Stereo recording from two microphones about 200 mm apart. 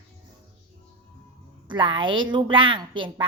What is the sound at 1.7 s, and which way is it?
Speech, 25° right (ahead or behind).